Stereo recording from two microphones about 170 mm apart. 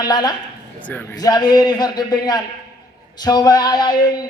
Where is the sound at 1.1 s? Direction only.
25° left (ahead or behind).